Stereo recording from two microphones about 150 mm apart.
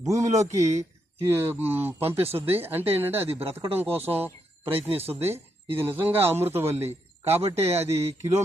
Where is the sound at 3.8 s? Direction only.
15° right (ahead or behind).